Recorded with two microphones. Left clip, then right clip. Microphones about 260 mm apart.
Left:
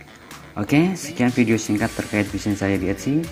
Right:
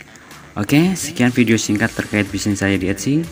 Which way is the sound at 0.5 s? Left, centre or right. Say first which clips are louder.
Right 3 dB; right.